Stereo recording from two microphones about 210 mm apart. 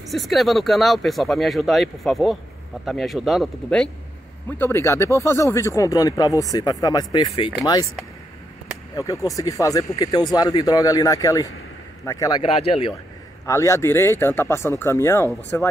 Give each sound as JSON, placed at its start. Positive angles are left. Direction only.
{"t": 0.1, "sound": "speech", "side_deg": 0}
{"t": 8.9, "sound": "speech", "side_deg": 15}
{"t": 13.5, "sound": "speech", "side_deg": 15}